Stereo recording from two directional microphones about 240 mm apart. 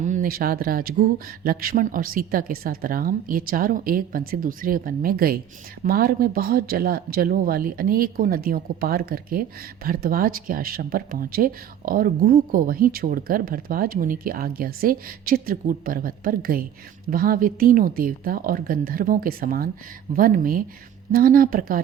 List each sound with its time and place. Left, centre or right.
0.0 s speech: right